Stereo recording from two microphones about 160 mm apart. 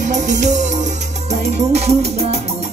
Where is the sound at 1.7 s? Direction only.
40° right (ahead or behind).